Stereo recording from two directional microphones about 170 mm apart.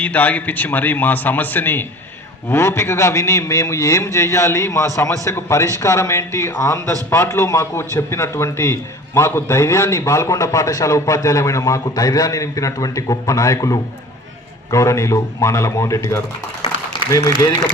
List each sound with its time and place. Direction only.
0.0 s a man's voice: 10° left (ahead or behind)